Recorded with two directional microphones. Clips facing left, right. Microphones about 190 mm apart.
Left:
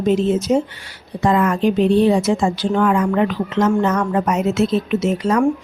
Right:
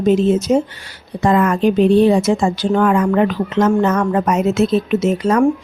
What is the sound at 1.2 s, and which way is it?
Speech, 50° right (ahead or behind).